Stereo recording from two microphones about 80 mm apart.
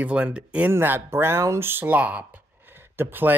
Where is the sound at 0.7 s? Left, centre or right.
Right.